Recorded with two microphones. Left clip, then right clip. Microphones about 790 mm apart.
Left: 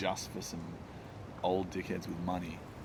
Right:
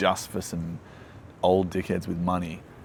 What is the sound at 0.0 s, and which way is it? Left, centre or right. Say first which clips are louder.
A man's voice: right 11 dB; right.